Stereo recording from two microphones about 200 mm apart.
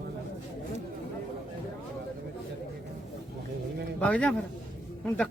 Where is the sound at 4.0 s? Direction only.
5° left (ahead or behind).